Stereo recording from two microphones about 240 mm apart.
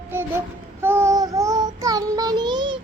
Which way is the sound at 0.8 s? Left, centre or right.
Centre.